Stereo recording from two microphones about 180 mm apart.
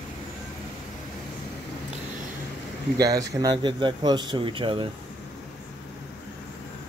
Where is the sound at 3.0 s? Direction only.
20° right (ahead or behind).